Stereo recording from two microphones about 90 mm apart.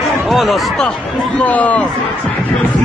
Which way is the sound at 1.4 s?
15° left (ahead or behind).